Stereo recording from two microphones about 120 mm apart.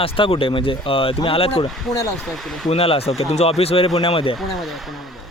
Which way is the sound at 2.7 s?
55° left (ahead or behind).